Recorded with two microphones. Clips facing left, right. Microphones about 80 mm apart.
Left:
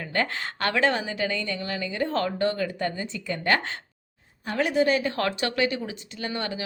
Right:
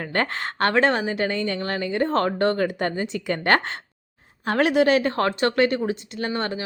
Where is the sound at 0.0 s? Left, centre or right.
Right.